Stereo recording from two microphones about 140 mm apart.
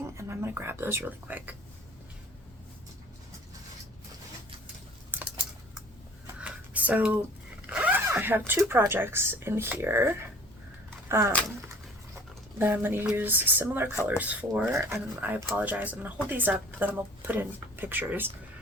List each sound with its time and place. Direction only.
0.0 s speech: 15° right (ahead or behind)
5.1 s typing: 15° right (ahead or behind)
6.4 s a sound: 10° right (ahead or behind)
7.7 s speech: 10° right (ahead or behind)
12.5 s speech: 15° right (ahead or behind)